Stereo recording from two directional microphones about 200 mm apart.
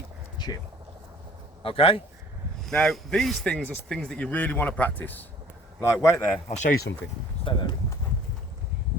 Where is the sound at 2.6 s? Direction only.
Centre (ahead or behind).